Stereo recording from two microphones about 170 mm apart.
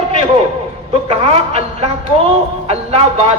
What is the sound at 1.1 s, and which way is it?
A man's voice, 35° right (ahead or behind).